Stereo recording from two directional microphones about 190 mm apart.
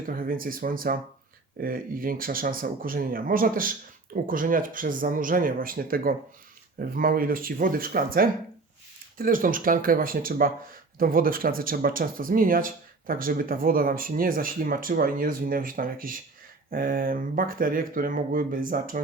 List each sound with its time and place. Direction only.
0.0 s speech: 50° right (ahead or behind)